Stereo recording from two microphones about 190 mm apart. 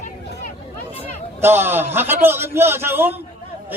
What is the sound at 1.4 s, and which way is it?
A man's voice, 10° right (ahead or behind).